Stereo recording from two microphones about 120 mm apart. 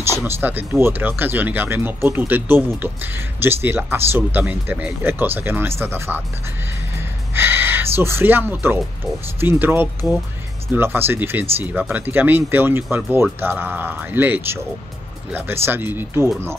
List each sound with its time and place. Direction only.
0.2 s speech: 15° right (ahead or behind)
7.0 s a sound: 20° right (ahead or behind)
9.4 s speech: 20° right (ahead or behind)